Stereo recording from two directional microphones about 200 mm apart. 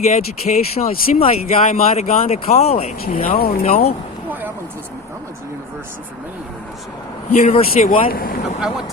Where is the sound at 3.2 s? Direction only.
45° left (ahead or behind).